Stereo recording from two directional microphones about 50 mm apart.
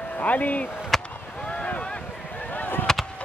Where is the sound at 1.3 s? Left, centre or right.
Left.